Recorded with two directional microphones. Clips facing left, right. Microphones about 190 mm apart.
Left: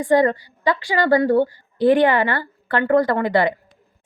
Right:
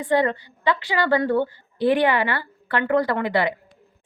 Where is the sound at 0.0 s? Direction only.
45° left (ahead or behind).